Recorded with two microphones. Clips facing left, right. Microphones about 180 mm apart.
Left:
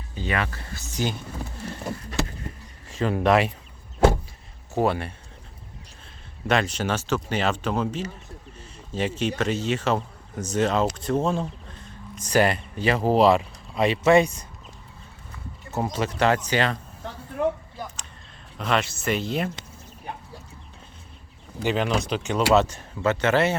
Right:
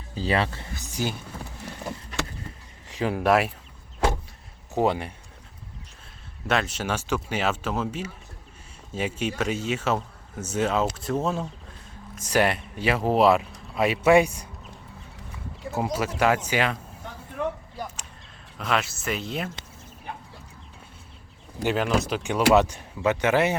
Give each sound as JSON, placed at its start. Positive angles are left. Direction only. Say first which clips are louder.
{"t": 0.1, "sound": "speech", "louder": "right 3 dB", "side_deg": -30}
{"t": 2.9, "sound": "speech", "louder": "left 1 dB", "side_deg": -10}
{"t": 4.7, "sound": "speech", "louder": "even", "side_deg": -15}
{"t": 6.5, "sound": "speech", "louder": "left 2 dB", "side_deg": 0}
{"t": 15.7, "sound": "speech", "louder": "even", "side_deg": -5}
{"t": 18.5, "sound": "speech", "louder": "left 2 dB", "side_deg": 0}
{"t": 21.7, "sound": "speech", "louder": "even", "side_deg": -5}